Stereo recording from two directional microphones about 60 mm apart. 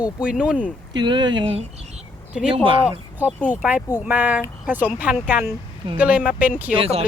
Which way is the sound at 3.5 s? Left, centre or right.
Right.